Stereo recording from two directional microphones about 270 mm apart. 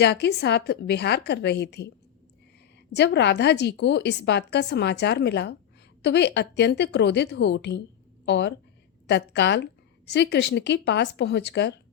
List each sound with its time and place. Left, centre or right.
0.0 s a woman's voice: left
2.9 s a woman's voice: left